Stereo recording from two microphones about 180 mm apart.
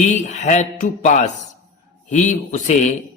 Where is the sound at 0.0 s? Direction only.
40° left (ahead or behind).